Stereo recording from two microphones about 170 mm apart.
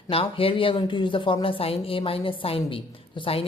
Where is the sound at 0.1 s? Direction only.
35° left (ahead or behind).